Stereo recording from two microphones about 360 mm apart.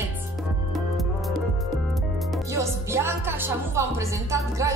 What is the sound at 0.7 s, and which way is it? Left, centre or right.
Music, centre.